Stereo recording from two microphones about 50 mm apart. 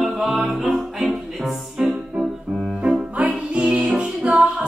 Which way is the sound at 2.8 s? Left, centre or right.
Right.